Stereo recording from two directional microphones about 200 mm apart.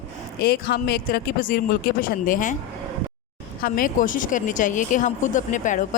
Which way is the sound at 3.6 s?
45° left (ahead or behind).